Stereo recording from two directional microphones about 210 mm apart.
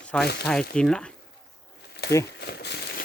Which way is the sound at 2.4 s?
50° left (ahead or behind).